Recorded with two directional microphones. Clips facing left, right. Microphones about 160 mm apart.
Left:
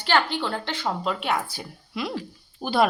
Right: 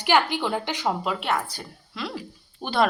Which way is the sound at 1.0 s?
Centre (ahead or behind).